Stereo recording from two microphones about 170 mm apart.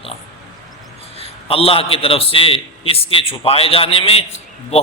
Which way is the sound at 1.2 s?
35° left (ahead or behind).